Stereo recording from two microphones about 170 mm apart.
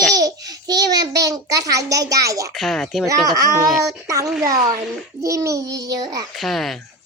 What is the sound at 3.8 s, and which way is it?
A child's voice, 20° right (ahead or behind).